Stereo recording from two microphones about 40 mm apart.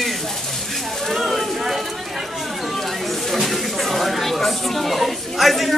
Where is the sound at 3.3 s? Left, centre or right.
Centre.